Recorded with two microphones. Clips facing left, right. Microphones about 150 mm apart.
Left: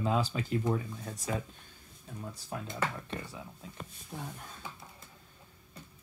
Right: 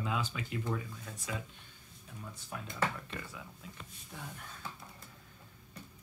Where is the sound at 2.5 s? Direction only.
30° left (ahead or behind).